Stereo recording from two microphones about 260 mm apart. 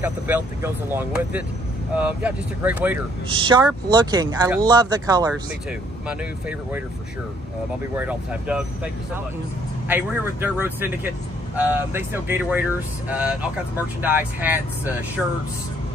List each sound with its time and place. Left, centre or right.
0.0 s speech: centre
3.3 s speech: centre
5.3 s speech: centre
7.9 s speech: centre